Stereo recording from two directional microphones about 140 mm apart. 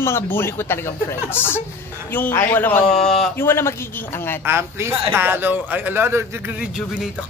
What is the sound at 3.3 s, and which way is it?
Speech, 15° left (ahead or behind).